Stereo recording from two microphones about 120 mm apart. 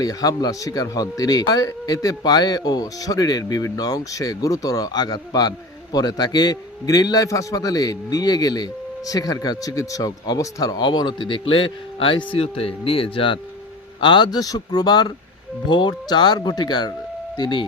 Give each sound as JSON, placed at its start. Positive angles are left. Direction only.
{"t": 0.0, "sound": "speech", "side_deg": 30}